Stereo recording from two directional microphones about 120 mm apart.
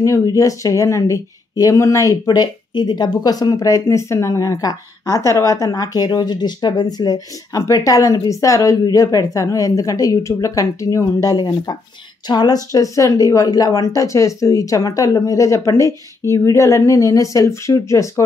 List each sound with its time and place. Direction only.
0.0 s speech: 25° left (ahead or behind)